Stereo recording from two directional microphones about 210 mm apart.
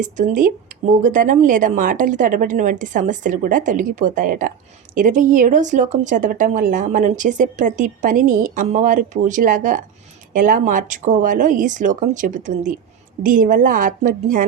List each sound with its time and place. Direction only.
0.0 s a woman's voice: 40° right (ahead or behind)